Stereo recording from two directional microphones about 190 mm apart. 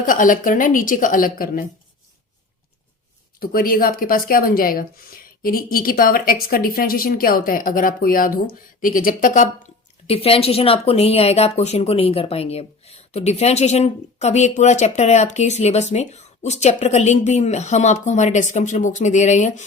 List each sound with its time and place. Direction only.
0.0 s speech: 45° left (ahead or behind)
3.4 s speech: 50° left (ahead or behind)
10.1 s a woman's voice: 30° left (ahead or behind)